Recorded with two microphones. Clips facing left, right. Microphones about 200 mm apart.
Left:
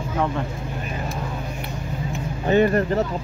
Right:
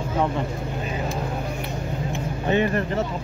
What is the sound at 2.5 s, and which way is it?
Speech, 40° left (ahead or behind).